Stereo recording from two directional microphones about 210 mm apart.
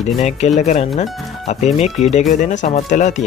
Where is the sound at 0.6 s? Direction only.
35° left (ahead or behind).